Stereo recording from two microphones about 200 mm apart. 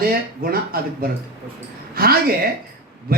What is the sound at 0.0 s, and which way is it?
Speech, 50° right (ahead or behind).